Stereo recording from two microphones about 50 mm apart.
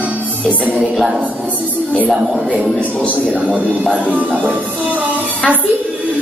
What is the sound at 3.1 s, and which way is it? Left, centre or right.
Music, right.